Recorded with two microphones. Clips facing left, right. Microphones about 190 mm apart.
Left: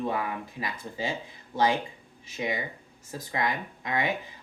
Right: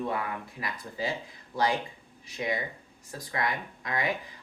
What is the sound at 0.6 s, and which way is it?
Speech, 25° left (ahead or behind).